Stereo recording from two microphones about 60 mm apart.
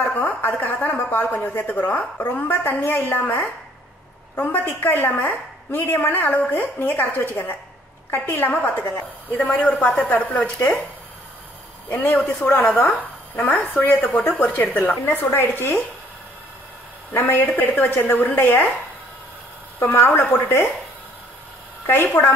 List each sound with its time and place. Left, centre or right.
0.0 s a woman's voice: left
2.4 s a woman's voice: left
11.9 s a woman's voice: left
17.1 s a woman's voice: left
19.8 s a woman's voice: left
21.8 s a woman's voice: left